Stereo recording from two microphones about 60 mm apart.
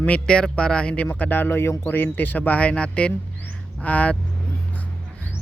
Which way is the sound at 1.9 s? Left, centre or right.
Left.